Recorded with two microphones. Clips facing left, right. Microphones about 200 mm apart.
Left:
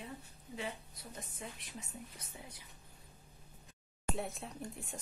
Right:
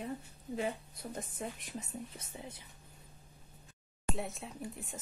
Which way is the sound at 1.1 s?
50° right (ahead or behind).